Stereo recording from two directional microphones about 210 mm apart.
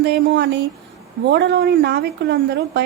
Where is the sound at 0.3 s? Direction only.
55° right (ahead or behind).